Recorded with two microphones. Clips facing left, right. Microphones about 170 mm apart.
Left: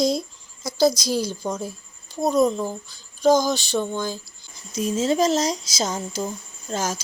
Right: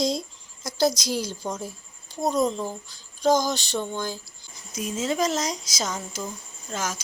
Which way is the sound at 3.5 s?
10° left (ahead or behind).